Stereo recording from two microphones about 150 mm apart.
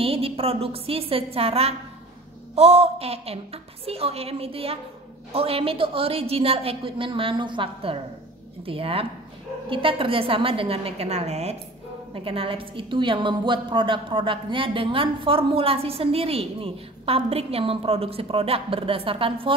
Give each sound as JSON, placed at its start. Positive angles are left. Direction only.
{"t": 0.0, "sound": "a woman's voice", "side_deg": -40}